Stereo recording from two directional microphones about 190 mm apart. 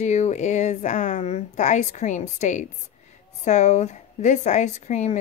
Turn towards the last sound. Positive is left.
turn(degrees=35)  # may be behind; listen again after turning